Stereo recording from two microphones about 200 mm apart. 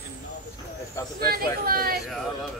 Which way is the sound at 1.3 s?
50° right (ahead or behind).